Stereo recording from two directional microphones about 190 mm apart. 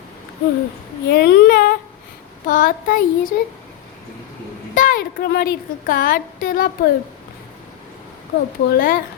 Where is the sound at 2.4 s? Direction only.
45° left (ahead or behind).